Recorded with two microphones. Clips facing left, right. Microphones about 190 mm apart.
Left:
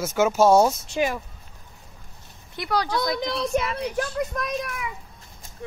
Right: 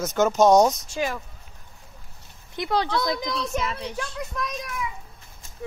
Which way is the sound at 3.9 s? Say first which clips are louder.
Left 5 dB; 50° left (ahead or behind).